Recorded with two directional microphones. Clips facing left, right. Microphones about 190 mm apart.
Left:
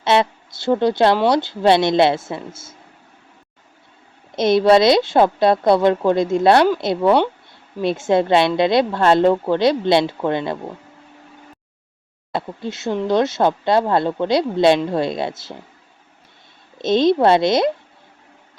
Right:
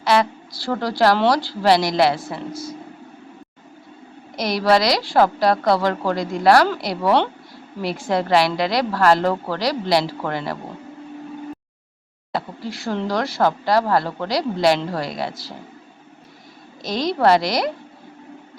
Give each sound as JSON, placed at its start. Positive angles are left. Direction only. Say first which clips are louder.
{"t": 0.0, "sound": "a woman's voice", "louder": "left 1 dB", "side_deg": 25}
{"t": 4.4, "sound": "a woman's voice", "louder": "left 5 dB", "side_deg": 25}
{"t": 12.3, "sound": "a woman's voice", "louder": "left 2 dB", "side_deg": 25}
{"t": 16.7, "sound": "a woman's voice", "louder": "left 8 dB", "side_deg": 25}